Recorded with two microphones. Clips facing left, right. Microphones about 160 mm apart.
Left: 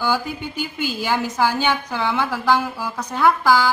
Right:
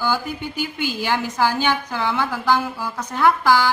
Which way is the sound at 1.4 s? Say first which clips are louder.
Right 1 dB; 15° left (ahead or behind).